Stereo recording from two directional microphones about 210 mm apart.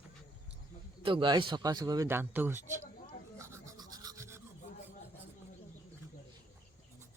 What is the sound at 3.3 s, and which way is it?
Rub, 15° right (ahead or behind).